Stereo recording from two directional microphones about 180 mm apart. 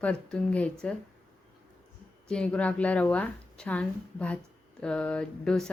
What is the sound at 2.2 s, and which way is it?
A woman's voice, 5° left (ahead or behind).